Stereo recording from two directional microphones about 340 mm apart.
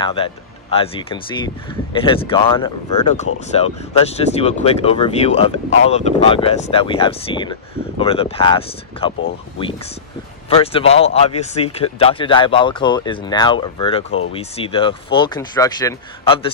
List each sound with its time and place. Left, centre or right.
0.0 s speech: centre
10.6 s speech: centre